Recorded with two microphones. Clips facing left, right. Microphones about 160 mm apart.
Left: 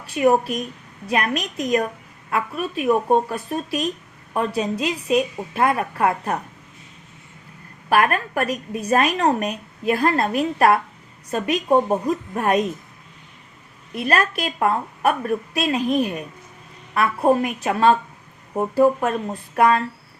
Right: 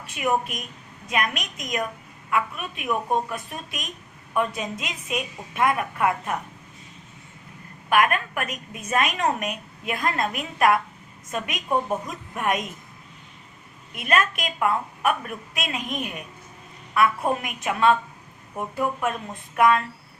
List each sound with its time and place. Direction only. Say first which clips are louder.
0.0 s a woman's voice: left 7 dB; 35° left (ahead or behind)
7.9 s a woman's voice: left 2 dB; 35° left (ahead or behind)
13.9 s a woman's voice: left 3 dB; 35° left (ahead or behind)